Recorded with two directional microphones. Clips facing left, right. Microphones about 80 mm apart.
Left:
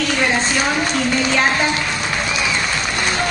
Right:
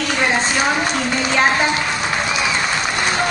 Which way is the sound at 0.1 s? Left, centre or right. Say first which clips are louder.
Right 3 dB; centre.